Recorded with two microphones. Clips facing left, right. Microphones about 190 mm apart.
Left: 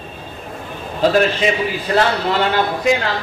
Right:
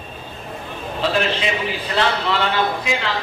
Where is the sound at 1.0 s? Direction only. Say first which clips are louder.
Left 6 dB; 45° left (ahead or behind).